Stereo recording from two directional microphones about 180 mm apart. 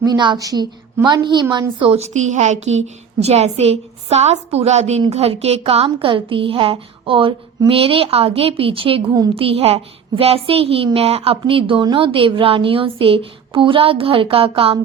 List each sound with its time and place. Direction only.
0.0 s a woman's voice: 25° right (ahead or behind)